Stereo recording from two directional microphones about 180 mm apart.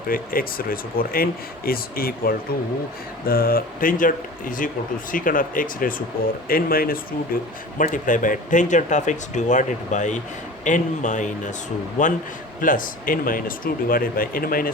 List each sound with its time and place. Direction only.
0.1 s speech: 55° left (ahead or behind)